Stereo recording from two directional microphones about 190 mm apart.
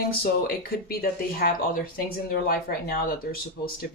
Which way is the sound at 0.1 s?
55° left (ahead or behind).